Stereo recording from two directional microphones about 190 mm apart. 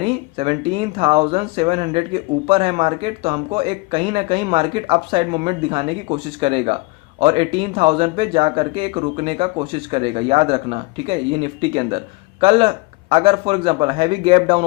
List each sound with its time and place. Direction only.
0.0 s speech: 30° right (ahead or behind)